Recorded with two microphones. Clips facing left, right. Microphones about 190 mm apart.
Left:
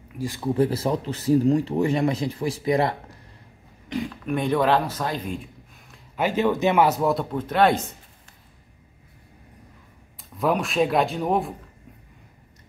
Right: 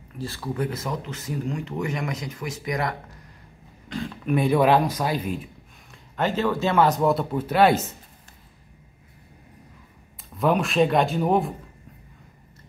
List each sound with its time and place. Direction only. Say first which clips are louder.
0.2 s speech: left 3 dB; 15° left (ahead or behind)
0.6 s speech: left 7 dB; 30° left (ahead or behind)
4.3 s speech: right 2 dB; 10° right (ahead or behind)
6.1 s speech: left 2 dB; 15° left (ahead or behind); by 7.8 s 5° right (ahead or behind)
10.3 s speech: right 1 dB; centre (ahead or behind)